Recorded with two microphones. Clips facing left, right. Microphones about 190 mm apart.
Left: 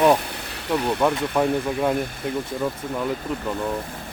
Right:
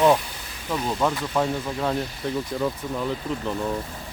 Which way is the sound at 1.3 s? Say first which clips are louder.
Left 3 dB; 15° left (ahead or behind).